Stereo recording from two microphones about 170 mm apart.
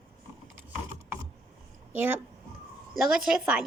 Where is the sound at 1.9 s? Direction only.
10° right (ahead or behind).